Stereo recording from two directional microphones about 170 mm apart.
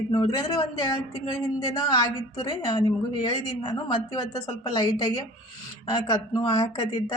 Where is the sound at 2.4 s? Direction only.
25° left (ahead or behind).